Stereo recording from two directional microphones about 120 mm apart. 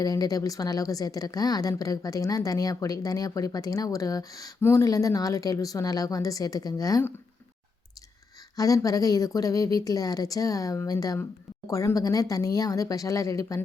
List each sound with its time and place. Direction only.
0.0 s speech: 30° left (ahead or behind)
8.5 s speech: 30° left (ahead or behind)